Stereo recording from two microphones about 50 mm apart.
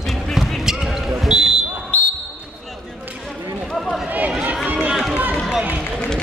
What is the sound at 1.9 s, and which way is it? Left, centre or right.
Basketball bounce, left.